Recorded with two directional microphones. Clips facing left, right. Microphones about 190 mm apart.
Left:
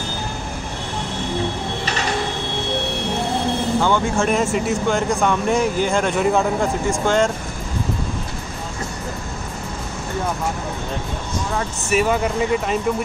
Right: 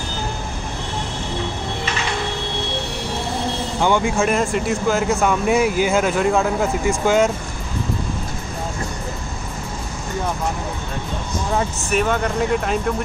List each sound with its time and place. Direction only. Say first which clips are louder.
3.8 s speech: right 5 dB; 15° right (ahead or behind)
4.3 s speech: even; centre (ahead or behind)
11.9 s speech: left 2 dB; 5° left (ahead or behind)